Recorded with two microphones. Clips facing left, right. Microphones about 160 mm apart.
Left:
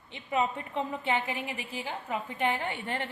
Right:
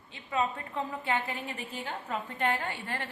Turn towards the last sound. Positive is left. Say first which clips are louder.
# left 3 dB
turn(degrees=20)  # may be behind; listen again after turning